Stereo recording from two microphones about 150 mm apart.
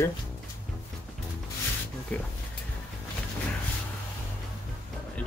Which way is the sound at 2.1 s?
10° left (ahead or behind).